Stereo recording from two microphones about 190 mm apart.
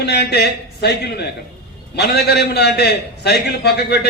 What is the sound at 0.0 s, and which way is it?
A man's voice, 60° left (ahead or behind).